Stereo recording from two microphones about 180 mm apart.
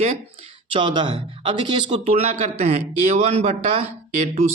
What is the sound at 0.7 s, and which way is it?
Speech, 25° right (ahead or behind).